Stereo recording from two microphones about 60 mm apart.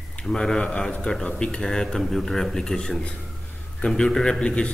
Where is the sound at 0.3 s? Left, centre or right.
Centre.